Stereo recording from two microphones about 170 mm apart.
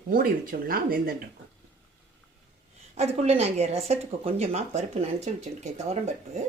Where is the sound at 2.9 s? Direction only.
40° right (ahead or behind).